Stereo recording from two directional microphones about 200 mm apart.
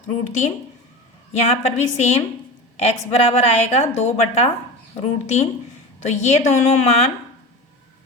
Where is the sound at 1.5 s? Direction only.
35° left (ahead or behind).